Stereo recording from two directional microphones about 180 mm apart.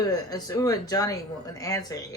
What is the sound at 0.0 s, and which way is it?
Speech, 20° left (ahead or behind).